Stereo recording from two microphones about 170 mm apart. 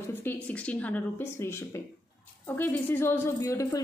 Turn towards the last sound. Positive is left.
turn(degrees=20)  # may be behind; listen again after turning